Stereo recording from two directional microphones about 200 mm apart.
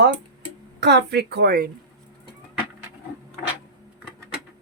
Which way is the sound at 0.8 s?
60° right (ahead or behind).